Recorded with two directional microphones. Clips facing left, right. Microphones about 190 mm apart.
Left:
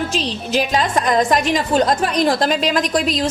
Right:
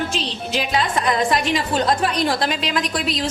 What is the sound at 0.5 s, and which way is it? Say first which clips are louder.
A woman's voice: left 4 dB; 40° left (ahead or behind).